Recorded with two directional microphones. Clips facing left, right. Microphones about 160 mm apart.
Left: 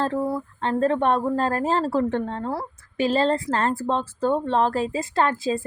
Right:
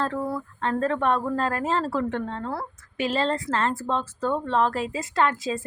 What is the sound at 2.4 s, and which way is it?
Speech, 15° left (ahead or behind).